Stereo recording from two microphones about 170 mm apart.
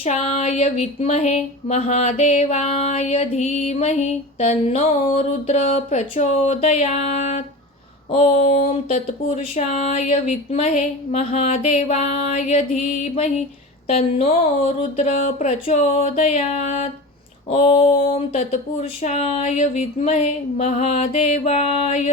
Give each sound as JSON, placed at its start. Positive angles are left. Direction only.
{"t": 0.0, "sound": "speech", "side_deg": 45}
{"t": 13.8, "sound": "speech", "side_deg": 40}